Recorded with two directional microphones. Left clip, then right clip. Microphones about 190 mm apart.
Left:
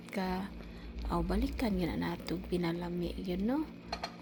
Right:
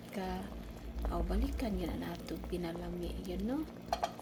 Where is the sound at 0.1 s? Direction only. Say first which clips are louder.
Left 4 dB; 45° left (ahead or behind).